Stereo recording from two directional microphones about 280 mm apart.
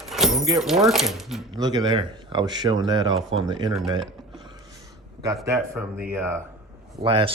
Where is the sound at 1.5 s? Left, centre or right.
Centre.